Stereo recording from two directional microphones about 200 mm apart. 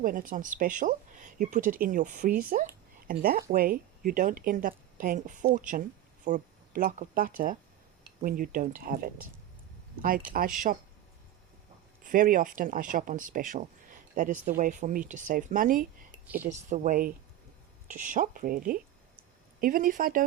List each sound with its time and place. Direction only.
0.0 s speech: 45° right (ahead or behind)
12.0 s speech: 45° right (ahead or behind)
16.1 s speech: 10° right (ahead or behind)
16.5 s speech: 35° right (ahead or behind)